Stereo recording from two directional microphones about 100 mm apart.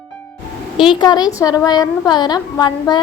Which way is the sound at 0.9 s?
45° left (ahead or behind).